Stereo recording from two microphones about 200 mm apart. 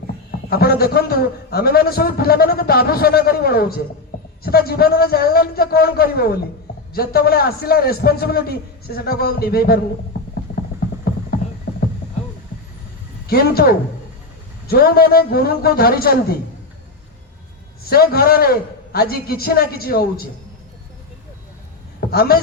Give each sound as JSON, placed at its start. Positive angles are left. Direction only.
{"t": 0.3, "sound": "a man's voice", "side_deg": 50}
{"t": 13.2, "sound": "a man's voice", "side_deg": 50}
{"t": 17.8, "sound": "a man's voice", "side_deg": 50}
{"t": 22.1, "sound": "a man's voice", "side_deg": 50}